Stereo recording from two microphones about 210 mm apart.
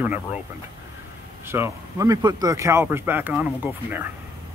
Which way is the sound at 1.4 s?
10° right (ahead or behind).